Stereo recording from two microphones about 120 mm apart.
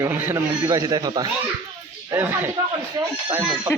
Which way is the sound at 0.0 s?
25° right (ahead or behind).